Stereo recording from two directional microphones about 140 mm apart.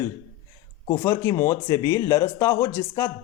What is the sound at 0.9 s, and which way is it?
Speech, 25° left (ahead or behind).